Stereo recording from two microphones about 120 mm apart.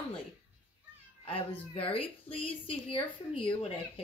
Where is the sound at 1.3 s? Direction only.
50° left (ahead or behind).